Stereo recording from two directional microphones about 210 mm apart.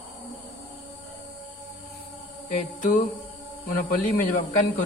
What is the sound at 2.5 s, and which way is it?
A man's voice, 35° left (ahead or behind).